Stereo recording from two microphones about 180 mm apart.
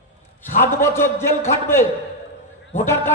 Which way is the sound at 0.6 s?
15° left (ahead or behind).